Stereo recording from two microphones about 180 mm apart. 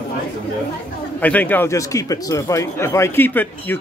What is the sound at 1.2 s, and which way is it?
A man's voice, 10° left (ahead or behind).